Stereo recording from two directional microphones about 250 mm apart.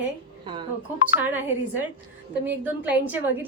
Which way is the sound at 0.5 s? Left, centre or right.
Centre.